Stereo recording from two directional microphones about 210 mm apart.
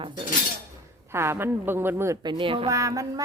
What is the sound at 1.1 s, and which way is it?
A woman's voice, 10° right (ahead or behind).